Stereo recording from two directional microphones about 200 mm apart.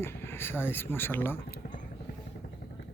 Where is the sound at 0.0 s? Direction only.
10° left (ahead or behind).